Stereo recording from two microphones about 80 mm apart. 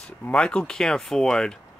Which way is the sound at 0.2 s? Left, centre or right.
Centre.